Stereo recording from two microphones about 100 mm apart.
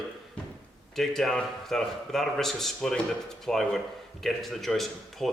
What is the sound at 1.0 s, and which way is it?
A man's voice, 5° left (ahead or behind).